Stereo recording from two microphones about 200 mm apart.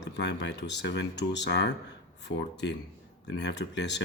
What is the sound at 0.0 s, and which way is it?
Speech, 60° left (ahead or behind).